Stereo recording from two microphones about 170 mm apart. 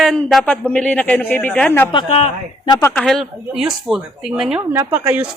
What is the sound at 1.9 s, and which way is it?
Speech, 30° left (ahead or behind).